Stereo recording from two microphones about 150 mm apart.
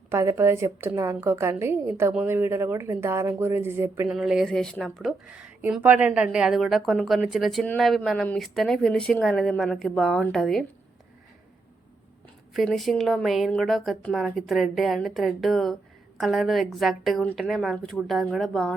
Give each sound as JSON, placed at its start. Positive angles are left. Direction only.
{"t": 0.1, "sound": "speech", "side_deg": -20}
{"t": 4.1, "sound": "a woman's voice", "side_deg": -5}
{"t": 12.5, "sound": "a woman's voice", "side_deg": 0}